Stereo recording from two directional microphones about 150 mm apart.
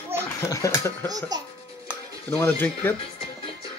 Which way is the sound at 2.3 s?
15° left (ahead or behind).